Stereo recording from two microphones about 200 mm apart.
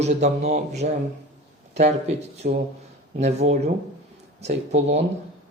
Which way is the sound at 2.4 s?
45° right (ahead or behind).